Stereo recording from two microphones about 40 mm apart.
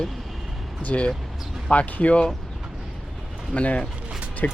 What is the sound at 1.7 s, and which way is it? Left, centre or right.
Speech, left.